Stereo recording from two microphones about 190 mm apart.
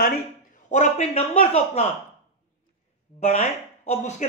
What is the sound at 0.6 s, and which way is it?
A man's voice, 40° left (ahead or behind).